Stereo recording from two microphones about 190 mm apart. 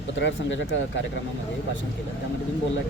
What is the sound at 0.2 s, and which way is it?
Speech, 70° left (ahead or behind).